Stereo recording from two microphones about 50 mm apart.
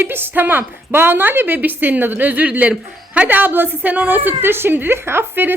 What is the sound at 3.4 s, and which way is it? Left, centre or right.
A woman's voice, right.